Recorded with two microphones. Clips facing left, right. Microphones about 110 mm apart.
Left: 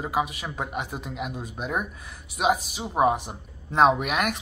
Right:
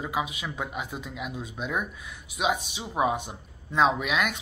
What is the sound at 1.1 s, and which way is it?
Speech, 55° left (ahead or behind).